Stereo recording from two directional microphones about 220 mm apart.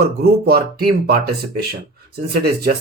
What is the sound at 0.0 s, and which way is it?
Speech, 45° right (ahead or behind).